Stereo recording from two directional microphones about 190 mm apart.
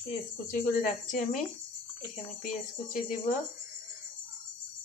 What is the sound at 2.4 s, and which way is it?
Speech, 45° left (ahead or behind).